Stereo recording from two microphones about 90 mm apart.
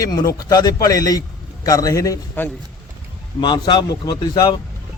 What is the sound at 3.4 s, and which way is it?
Speech, 55° left (ahead or behind).